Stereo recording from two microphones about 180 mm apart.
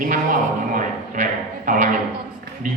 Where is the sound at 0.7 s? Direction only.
45° right (ahead or behind).